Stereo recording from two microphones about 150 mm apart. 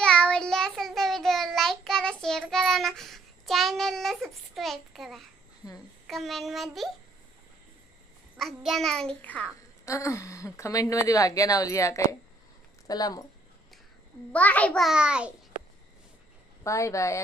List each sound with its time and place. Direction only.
0.0 s child singing: 5° left (ahead or behind)
6.1 s a child's voice: centre (ahead or behind)
8.4 s a child's voice: centre (ahead or behind)
9.8 s speech: 20° left (ahead or behind)
14.3 s a child's voice: 10° left (ahead or behind); by 15.3 s 5° right (ahead or behind)
16.6 s speech: 20° left (ahead or behind)